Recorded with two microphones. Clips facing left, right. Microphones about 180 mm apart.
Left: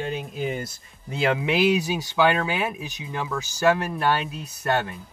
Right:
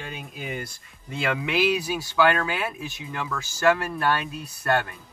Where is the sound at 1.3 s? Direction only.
25° left (ahead or behind).